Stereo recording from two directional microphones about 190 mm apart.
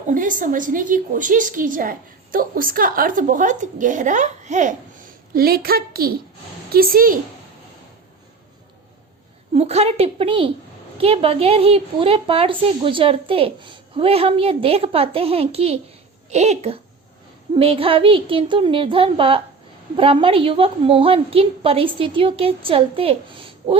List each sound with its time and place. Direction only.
0.1 s a woman's voice: 45° right (ahead or behind)
9.6 s a woman's voice: 35° right (ahead or behind)